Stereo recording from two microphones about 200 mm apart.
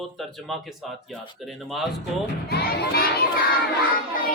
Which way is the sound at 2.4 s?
55° left (ahead or behind).